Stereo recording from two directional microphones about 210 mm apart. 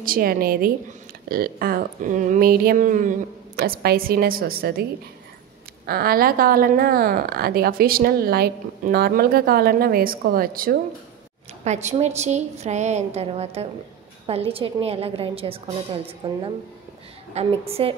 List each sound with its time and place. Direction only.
0.0 s speech: 45° right (ahead or behind)
5.9 s speech: 45° right (ahead or behind)
11.6 s a woman's voice: 35° right (ahead or behind)